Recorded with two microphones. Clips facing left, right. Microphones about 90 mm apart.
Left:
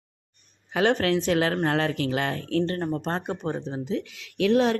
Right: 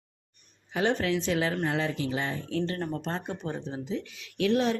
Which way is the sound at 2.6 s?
40° left (ahead or behind).